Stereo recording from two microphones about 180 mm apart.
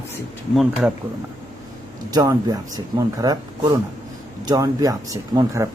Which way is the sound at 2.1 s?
20° right (ahead or behind).